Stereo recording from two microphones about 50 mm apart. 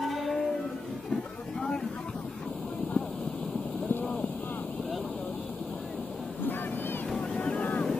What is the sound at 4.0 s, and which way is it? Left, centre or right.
Boat, left.